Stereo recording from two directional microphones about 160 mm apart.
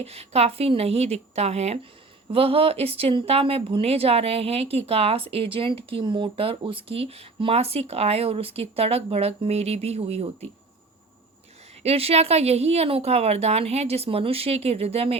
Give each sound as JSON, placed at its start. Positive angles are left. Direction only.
{"t": 0.0, "sound": "speech", "side_deg": -40}
{"t": 11.8, "sound": "speech", "side_deg": -40}